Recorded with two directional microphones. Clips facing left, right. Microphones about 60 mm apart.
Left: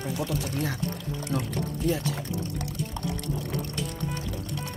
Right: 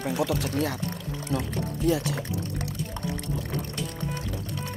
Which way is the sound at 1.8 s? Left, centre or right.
Right.